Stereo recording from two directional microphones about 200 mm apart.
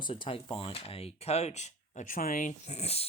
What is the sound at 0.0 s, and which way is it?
Speech, 25° left (ahead or behind).